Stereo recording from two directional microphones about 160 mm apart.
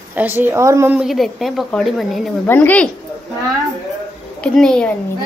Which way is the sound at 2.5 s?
10° left (ahead or behind).